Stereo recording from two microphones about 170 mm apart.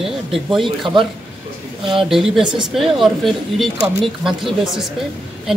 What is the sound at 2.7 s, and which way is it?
Speech, centre (ahead or behind).